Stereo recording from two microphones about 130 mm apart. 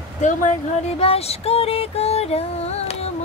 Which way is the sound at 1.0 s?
50° left (ahead or behind).